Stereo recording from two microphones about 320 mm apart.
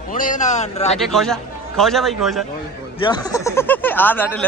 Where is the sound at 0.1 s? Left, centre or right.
Left.